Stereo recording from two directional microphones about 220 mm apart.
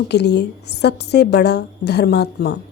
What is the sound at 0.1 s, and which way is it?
A woman's voice, 50° left (ahead or behind).